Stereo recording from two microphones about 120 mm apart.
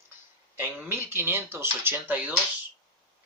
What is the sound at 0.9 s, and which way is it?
Speech, 20° right (ahead or behind).